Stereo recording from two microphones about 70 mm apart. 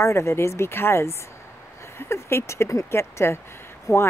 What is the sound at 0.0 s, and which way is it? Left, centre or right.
Speech, left.